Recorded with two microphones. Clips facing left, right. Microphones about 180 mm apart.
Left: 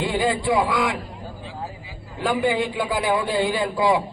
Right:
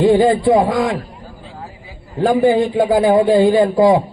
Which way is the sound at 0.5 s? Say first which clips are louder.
Right 7 dB; 45° right (ahead or behind).